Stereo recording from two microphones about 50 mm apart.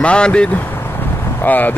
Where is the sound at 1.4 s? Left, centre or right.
Left.